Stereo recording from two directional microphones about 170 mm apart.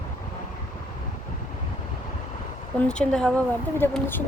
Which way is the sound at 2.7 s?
5° left (ahead or behind).